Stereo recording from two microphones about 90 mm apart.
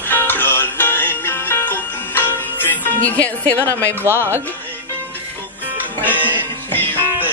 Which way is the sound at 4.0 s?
25° right (ahead or behind).